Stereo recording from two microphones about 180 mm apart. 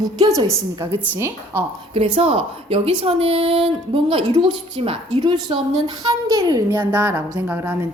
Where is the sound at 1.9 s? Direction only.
35° right (ahead or behind).